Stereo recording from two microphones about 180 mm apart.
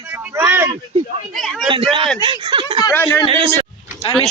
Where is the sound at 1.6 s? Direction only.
30° right (ahead or behind).